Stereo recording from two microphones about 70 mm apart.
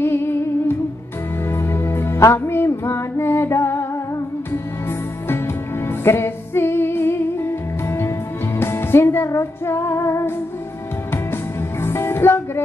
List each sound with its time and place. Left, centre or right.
0.0 s music: left
6.0 s music: left
8.5 s music: left
11.8 s music: left